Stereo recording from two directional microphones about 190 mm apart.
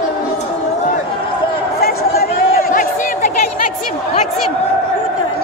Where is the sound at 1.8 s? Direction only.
50° left (ahead or behind).